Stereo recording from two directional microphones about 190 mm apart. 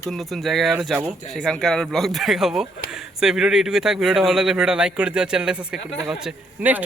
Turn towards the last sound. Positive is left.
turn(degrees=-10)  # may be behind; listen again after turning